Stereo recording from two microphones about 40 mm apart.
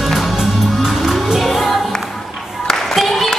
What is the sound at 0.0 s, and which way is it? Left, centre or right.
Music, centre.